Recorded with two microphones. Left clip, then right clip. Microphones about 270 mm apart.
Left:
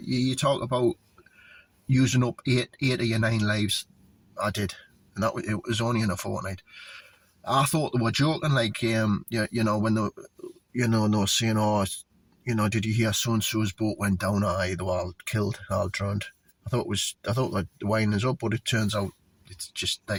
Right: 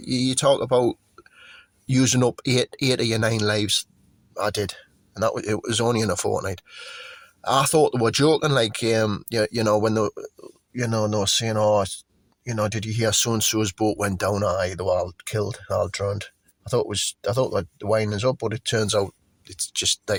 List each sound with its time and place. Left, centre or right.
0.1 s speech: right
1.9 s speech: right
17.2 s speech: right